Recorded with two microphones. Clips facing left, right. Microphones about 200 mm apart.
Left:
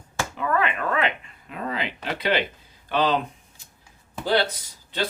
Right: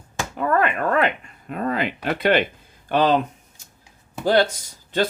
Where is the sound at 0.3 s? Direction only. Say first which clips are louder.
Right 4 dB; 45° right (ahead or behind).